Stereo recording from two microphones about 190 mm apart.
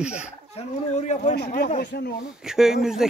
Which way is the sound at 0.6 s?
35° left (ahead or behind).